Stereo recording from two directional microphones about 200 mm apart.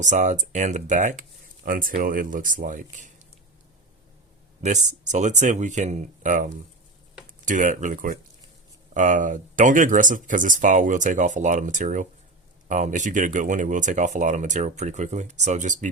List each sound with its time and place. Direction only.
0.0 s speech: 35° right (ahead or behind)
4.6 s speech: 35° right (ahead or behind)